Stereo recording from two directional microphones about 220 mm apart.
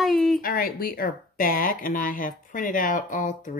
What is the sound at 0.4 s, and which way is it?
Speech, 40° left (ahead or behind).